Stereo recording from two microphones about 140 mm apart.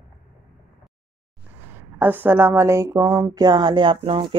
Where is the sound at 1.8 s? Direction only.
15° right (ahead or behind).